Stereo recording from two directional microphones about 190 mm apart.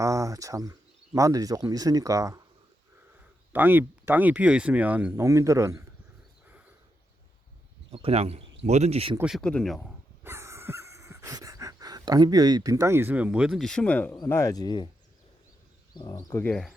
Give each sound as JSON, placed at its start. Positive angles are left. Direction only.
{"t": 0.0, "sound": "speech", "side_deg": -15}
{"t": 3.5, "sound": "speech", "side_deg": -10}
{"t": 7.9, "sound": "speech", "side_deg": -30}
{"t": 9.1, "sound": "speech", "side_deg": 0}
{"t": 10.2, "sound": "a sound", "side_deg": -15}
{"t": 14.2, "sound": "speech", "side_deg": 15}
{"t": 16.0, "sound": "speech", "side_deg": 20}